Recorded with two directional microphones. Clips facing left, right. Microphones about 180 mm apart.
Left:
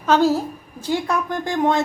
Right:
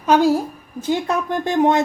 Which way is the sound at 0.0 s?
15° right (ahead or behind).